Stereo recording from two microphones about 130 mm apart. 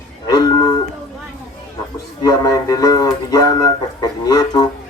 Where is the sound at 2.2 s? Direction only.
30° left (ahead or behind).